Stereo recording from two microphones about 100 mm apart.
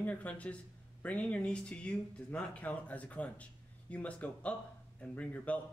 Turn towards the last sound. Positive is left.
turn(degrees=15)  # may be behind; listen again after turning